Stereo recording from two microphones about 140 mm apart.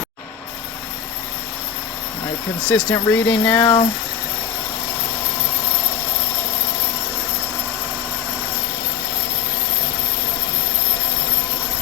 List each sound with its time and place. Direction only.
2.6 s speech: 5° left (ahead or behind)
3.6 s speech: 35° left (ahead or behind)